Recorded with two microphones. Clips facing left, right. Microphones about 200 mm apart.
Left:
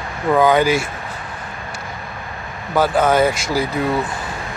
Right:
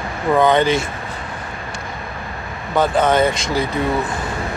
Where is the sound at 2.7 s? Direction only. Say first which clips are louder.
Even; 5° left (ahead or behind).